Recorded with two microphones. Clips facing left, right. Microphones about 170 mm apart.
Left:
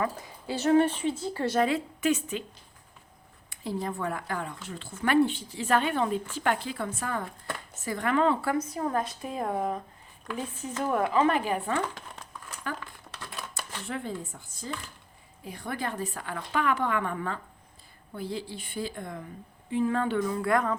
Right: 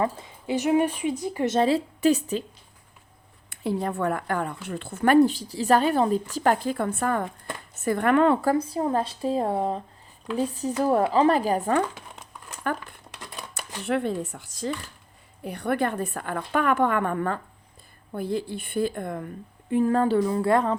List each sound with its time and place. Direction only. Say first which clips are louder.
0.0 s a woman's voice: right 4 dB; 25° right (ahead or behind)
3.5 s speech: right 5 dB; 60° right (ahead or behind)
5.1 s speech: right 5 dB; 40° right (ahead or behind); by 8.4 s 60° right (ahead or behind)
8.4 s speech: right 5 dB; 30° right (ahead or behind)
13.1 s a sound: right 1 dB; 20° right (ahead or behind)
13.8 s speech: right 10 dB; 70° right (ahead or behind); by 14.7 s 90° right
15.4 s a woman's voice: right 8 dB; 65° right (ahead or behind)
19.7 s speech: right 6 dB; 40° right (ahead or behind)